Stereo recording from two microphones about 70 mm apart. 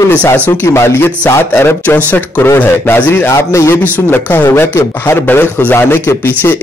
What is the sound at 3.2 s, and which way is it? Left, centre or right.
Speech, left.